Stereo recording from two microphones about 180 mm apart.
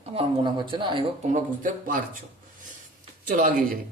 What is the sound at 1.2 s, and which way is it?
Speech, 45° right (ahead or behind).